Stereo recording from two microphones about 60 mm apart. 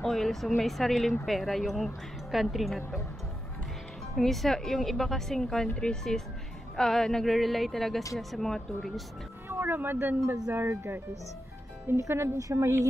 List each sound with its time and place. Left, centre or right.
0.0 s speech: centre
4.1 s speech: centre
6.8 s speech: centre
9.5 s speech: right
12.0 s speech: right
12.4 s speech: right